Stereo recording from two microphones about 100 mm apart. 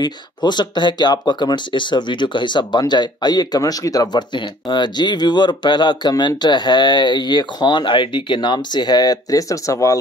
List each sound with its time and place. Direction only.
0.0 s speech: 45° left (ahead or behind)